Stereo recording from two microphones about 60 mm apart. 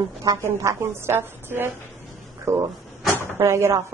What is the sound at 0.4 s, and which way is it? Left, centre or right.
Speech, right.